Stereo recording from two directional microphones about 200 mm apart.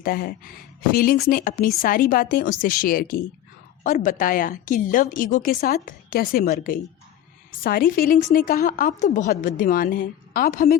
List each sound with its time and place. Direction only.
0.0 s a woman's voice: 45° left (ahead or behind)